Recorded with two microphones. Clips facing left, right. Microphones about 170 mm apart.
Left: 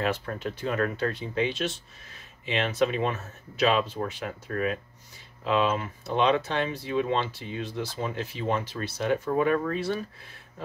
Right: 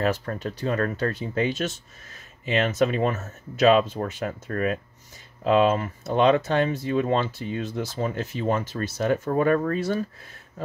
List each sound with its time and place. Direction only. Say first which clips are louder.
0.0 s speech: right 3 dB; 40° right (ahead or behind)